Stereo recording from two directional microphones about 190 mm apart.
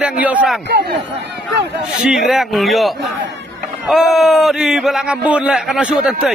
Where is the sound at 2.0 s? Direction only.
Centre (ahead or behind).